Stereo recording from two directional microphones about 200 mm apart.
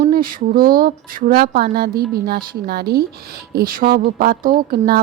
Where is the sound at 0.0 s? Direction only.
45° right (ahead or behind).